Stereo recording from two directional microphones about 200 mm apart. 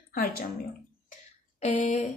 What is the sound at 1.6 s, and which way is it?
Speech, 35° left (ahead or behind).